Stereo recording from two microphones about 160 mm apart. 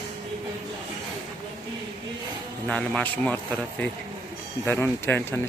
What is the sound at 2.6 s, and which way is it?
Speech, 5° left (ahead or behind).